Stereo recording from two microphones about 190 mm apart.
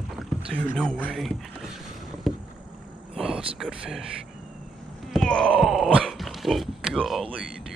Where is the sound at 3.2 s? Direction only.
5° right (ahead or behind).